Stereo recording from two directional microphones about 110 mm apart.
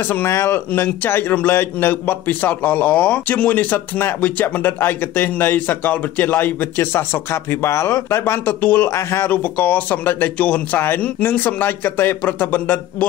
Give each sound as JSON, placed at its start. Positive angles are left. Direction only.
{"t": 0.1, "sound": "a man's voice", "side_deg": 20}